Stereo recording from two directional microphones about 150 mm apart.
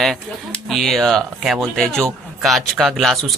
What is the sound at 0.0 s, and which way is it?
Speech, centre (ahead or behind).